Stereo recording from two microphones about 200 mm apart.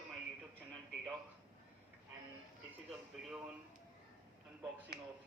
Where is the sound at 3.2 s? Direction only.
5° right (ahead or behind).